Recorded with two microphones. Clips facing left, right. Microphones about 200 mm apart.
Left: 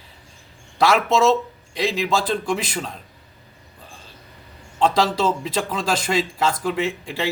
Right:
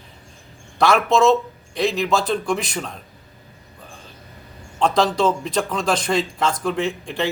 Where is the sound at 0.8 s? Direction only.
Centre (ahead or behind).